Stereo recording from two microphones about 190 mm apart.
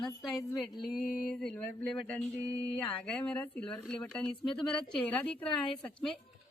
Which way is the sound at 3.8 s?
Centre (ahead or behind).